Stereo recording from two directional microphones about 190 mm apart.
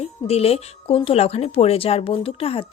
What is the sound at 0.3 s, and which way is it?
A woman's voice, 30° left (ahead or behind).